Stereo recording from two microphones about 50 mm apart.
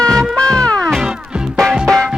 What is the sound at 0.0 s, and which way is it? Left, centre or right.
Music, centre.